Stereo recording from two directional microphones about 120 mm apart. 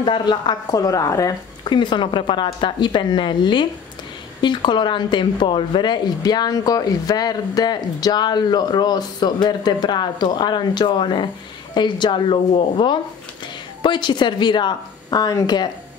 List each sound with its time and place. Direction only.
0.0 s speech: 40° left (ahead or behind)